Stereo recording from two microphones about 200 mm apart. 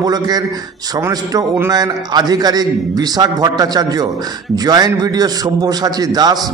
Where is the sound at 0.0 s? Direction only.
20° right (ahead or behind).